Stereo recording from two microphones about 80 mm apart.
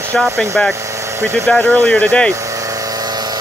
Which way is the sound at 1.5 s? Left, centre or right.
Centre.